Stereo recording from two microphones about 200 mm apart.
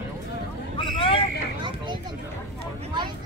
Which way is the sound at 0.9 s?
25° left (ahead or behind).